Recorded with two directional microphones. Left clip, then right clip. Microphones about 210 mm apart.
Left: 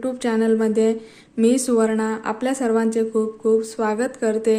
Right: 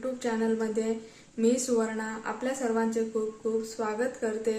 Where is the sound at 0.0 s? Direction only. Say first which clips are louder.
Left 8 dB; 45° left (ahead or behind).